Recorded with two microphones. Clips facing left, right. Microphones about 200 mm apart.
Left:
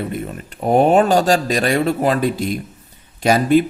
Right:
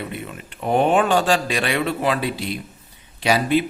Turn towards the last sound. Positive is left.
turn(degrees=45)  # may be behind; listen again after turning